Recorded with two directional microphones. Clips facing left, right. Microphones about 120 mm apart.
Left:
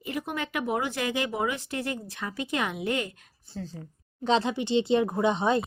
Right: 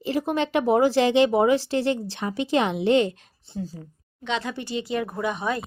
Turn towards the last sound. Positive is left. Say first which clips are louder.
# left 3 dB
turn(degrees=25)  # may be behind; listen again after turning